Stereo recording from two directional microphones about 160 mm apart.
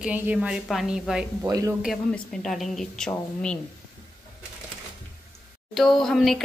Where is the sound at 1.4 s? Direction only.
20° right (ahead or behind).